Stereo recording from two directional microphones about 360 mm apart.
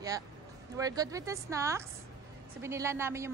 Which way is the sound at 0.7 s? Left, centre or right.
Centre.